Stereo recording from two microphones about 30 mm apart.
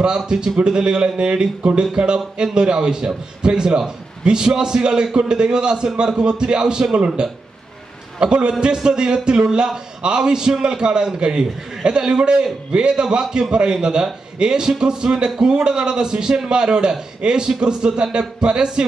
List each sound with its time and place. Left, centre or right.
0.0 s a man's voice: right